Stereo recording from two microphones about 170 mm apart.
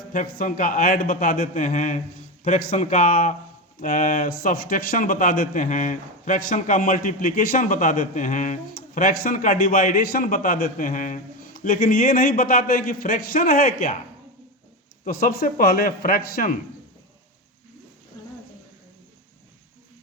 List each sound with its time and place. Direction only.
0.1 s a man's voice: 50° left (ahead or behind)
15.0 s a man's voice: 60° left (ahead or behind)